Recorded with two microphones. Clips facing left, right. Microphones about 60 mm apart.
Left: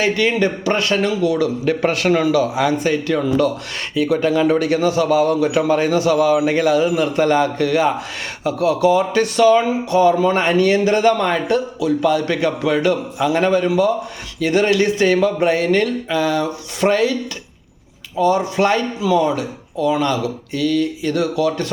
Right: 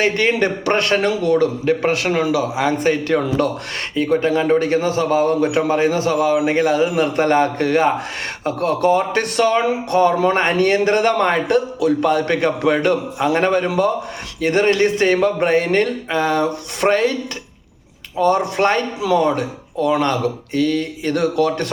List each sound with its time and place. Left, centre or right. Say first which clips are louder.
0.0 s a man's voice: even; right
1.6 s speech: even; right
2.7 s a man's voice: right 1 dB; right
18.5 s a man's voice: even; right
18.9 s a man's voice: even; right